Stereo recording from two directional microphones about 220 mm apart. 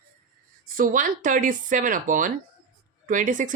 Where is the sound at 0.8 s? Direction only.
40° right (ahead or behind).